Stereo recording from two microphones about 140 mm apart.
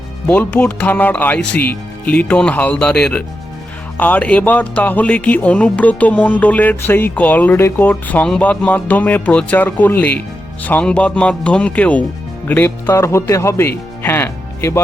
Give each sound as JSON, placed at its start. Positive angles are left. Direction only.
{"t": 0.3, "sound": "speech", "side_deg": 10}